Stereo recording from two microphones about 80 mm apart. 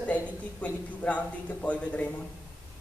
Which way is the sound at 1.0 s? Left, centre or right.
Centre.